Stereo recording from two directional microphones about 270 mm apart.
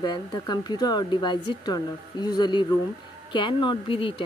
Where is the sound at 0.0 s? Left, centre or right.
Centre.